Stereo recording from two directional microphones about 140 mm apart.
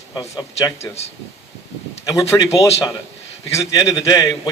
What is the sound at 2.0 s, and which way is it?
Speech, 25° left (ahead or behind).